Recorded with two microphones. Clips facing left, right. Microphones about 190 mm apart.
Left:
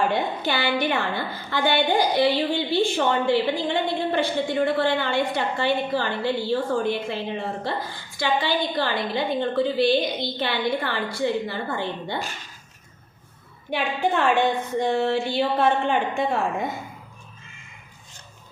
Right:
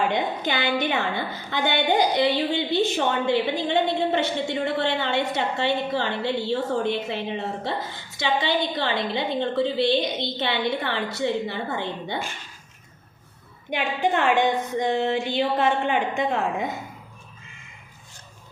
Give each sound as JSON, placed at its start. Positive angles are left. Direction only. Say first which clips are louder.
{"t": 0.1, "sound": "a woman's voice", "louder": "left 1 dB", "side_deg": -20}
{"t": 13.7, "sound": "a woman's voice", "louder": "even", "side_deg": -15}